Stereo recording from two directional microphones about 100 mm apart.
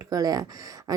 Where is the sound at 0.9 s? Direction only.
35° right (ahead or behind).